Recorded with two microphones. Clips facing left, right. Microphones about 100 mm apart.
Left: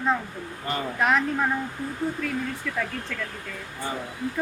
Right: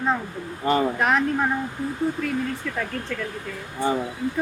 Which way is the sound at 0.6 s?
25° right (ahead or behind).